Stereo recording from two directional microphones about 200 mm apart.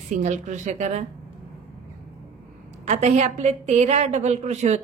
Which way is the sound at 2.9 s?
35° right (ahead or behind).